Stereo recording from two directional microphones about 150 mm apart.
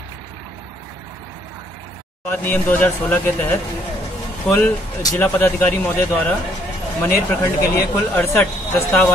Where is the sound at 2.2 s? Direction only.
15° left (ahead or behind).